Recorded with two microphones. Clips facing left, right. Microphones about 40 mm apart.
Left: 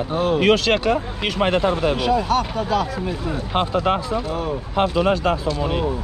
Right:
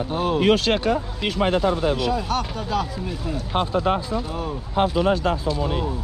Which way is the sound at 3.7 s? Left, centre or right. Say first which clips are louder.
Left 1 dB; left.